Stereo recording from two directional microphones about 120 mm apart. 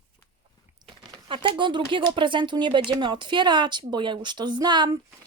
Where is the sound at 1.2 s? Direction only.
45° right (ahead or behind).